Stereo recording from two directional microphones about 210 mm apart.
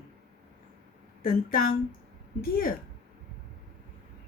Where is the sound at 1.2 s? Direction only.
40° left (ahead or behind).